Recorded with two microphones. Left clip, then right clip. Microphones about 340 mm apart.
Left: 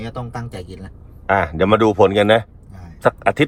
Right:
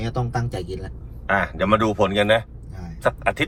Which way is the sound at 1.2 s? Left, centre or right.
Left.